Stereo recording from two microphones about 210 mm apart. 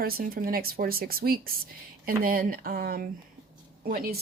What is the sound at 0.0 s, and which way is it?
Speech, 45° right (ahead or behind).